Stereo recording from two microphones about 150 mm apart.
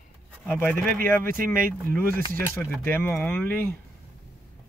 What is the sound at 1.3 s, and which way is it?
Speech, 70° right (ahead or behind).